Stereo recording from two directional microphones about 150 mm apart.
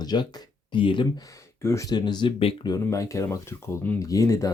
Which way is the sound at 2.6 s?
20° left (ahead or behind).